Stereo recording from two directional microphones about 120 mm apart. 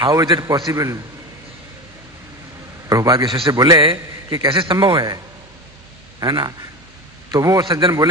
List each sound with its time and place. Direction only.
0.0 s a man's voice: 30° right (ahead or behind)
2.9 s a man's voice: 30° right (ahead or behind)
3.2 s a man's voice: 45° right (ahead or behind)